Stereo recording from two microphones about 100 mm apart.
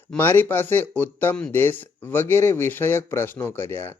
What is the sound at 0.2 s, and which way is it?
Speech, 20° left (ahead or behind).